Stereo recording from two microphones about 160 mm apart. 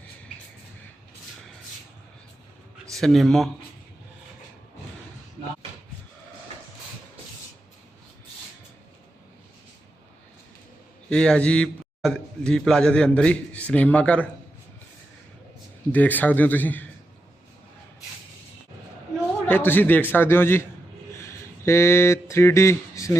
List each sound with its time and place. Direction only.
2.9 s speech: centre (ahead or behind)
11.1 s a man's voice: 5° left (ahead or behind)
15.9 s a man's voice: 10° left (ahead or behind)
19.5 s a man's voice: 10° left (ahead or behind)
21.1 s a sound: 15° left (ahead or behind)